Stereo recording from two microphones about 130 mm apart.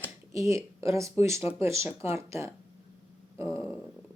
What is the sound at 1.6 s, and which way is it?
Speech, 20° right (ahead or behind).